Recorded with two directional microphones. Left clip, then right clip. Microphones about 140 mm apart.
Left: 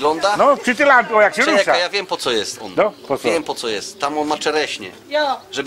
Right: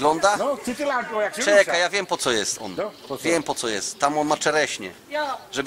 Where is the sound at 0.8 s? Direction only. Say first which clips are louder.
Left 12 dB; 35° left (ahead or behind).